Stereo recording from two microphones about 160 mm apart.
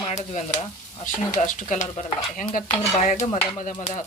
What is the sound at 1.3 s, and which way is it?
Stir, 50° left (ahead or behind).